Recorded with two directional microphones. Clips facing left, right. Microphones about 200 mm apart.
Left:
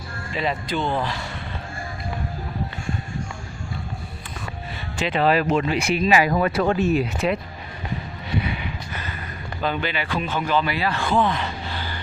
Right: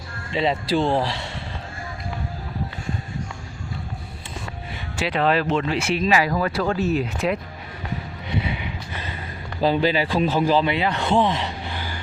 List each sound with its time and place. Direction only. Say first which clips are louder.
0.3 s speech: right 4 dB; 25° right (ahead or behind)
4.9 s speech: left 1 dB; 5° right (ahead or behind)
5.2 s speech: left 1 dB; 5° left (ahead or behind)
6.1 s speech: left 2 dB; 20° left (ahead or behind)
7.0 s speech: left 1 dB; centre (ahead or behind)
8.3 s a sound: even; 20° right (ahead or behind)
9.6 s speech: right 6 dB; 30° right (ahead or behind); by 11.9 s 15° right (ahead or behind)